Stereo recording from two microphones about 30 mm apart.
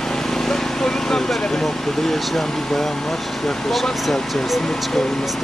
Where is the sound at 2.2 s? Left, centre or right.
Centre.